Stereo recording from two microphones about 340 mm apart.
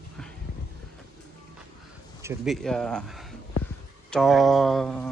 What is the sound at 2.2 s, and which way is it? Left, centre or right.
Speech, centre.